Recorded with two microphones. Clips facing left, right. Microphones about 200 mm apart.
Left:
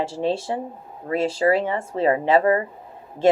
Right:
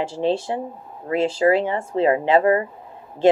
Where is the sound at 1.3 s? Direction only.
25° right (ahead or behind).